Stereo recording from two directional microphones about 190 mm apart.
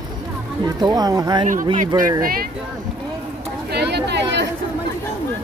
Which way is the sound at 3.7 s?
60° right (ahead or behind).